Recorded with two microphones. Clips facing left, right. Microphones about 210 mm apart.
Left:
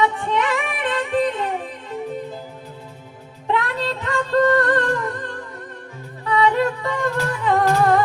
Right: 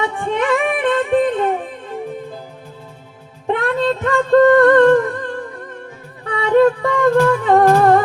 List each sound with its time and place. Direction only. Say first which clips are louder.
0.2 s music: right 5 dB; 50° right (ahead or behind)
3.4 s music: right 6 dB; 50° right (ahead or behind)
6.2 s music: right 6 dB; 50° right (ahead or behind)